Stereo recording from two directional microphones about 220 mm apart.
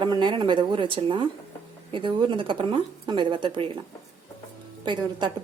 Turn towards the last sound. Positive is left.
turn(degrees=-20)  # may be behind; listen again after turning